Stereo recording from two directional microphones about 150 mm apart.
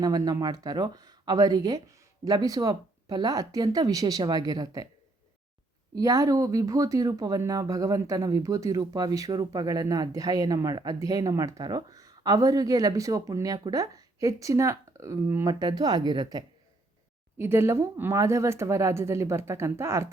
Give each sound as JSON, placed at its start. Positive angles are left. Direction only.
{"t": 0.0, "sound": "speech", "side_deg": -25}
{"t": 5.9, "sound": "speech", "side_deg": -25}
{"t": 17.3, "sound": "speech", "side_deg": -15}